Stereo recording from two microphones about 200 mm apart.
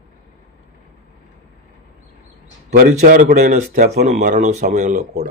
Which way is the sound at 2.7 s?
35° right (ahead or behind).